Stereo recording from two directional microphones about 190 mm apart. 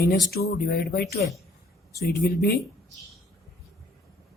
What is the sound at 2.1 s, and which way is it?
Speech, 55° left (ahead or behind).